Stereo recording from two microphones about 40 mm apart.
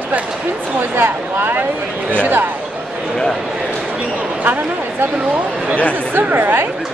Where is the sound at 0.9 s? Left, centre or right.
Right.